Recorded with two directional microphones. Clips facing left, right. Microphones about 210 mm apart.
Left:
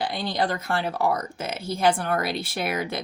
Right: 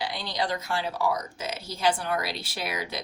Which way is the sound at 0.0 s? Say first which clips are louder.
Left 5 dB; 55° left (ahead or behind).